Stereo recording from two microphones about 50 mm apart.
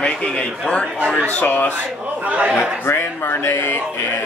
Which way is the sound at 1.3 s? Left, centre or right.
Left.